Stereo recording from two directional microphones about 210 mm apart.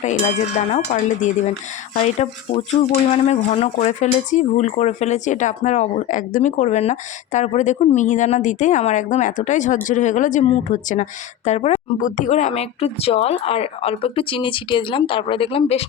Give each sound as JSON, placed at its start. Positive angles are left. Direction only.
{"t": 1.2, "sound": "a woman's voice", "side_deg": 35}